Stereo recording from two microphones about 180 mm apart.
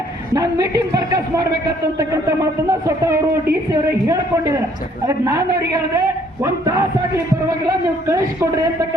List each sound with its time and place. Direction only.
0.3 s a man's voice: 20° right (ahead or behind)
8.4 s a woman's voice: 15° right (ahead or behind)